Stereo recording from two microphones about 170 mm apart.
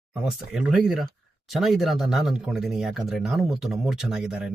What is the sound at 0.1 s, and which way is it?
Speech, 5° right (ahead or behind).